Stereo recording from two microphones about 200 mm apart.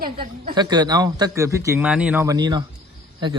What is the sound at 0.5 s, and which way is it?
A man's voice, 20° right (ahead or behind).